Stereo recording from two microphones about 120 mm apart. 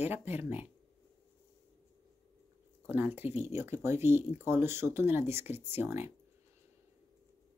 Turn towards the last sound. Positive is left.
turn(degrees=-20)  # may be behind; listen again after turning